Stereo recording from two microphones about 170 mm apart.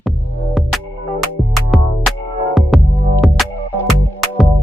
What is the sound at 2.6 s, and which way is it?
Music, centre (ahead or behind).